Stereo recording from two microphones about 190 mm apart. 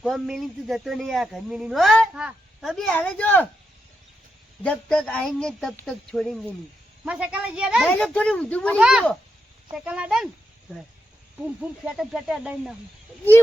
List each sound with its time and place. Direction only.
0.0 s a man's voice: centre (ahead or behind)
4.6 s a man's voice: 5° left (ahead or behind)
8.8 s a man's voice: 5° right (ahead or behind)
11.4 s a man's voice: 5° right (ahead or behind)